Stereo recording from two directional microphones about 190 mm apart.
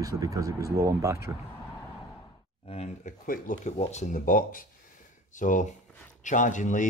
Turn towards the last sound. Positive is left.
turn(degrees=40)  # may be behind; listen again after turning